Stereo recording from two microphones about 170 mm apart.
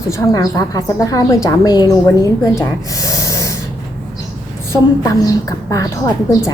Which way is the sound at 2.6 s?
20° left (ahead or behind).